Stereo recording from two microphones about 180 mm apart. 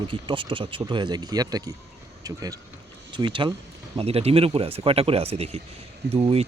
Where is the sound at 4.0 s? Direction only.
35° right (ahead or behind).